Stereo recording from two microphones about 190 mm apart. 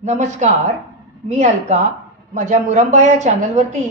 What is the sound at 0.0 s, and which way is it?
A woman's voice, 40° right (ahead or behind).